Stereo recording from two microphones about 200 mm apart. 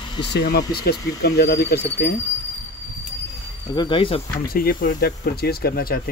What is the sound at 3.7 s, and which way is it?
Speech, 25° left (ahead or behind).